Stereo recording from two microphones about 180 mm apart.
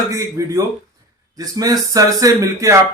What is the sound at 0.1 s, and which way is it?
Speech, 15° right (ahead or behind).